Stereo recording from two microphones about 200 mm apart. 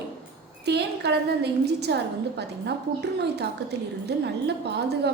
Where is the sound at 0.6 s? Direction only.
55° right (ahead or behind).